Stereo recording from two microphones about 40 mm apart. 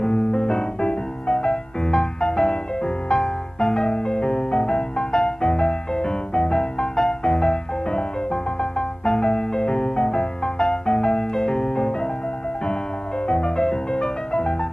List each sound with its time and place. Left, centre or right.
0.0 s music: left
3.9 s music: left
7.0 s music: centre; by 12.1 s left
13.3 s music: centre